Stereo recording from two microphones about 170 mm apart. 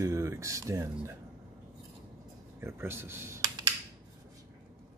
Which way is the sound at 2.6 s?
15° right (ahead or behind).